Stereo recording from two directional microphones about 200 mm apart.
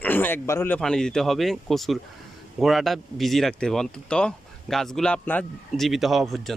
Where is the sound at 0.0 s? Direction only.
10° left (ahead or behind).